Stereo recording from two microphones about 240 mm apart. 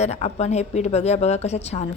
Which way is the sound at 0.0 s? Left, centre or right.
Left.